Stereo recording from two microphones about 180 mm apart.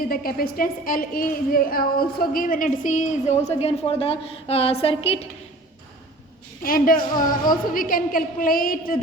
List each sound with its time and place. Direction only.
0.1 s a woman's voice: 55° left (ahead or behind); by 5.3 s 30° left (ahead or behind)
6.6 s a woman's voice: 50° left (ahead or behind)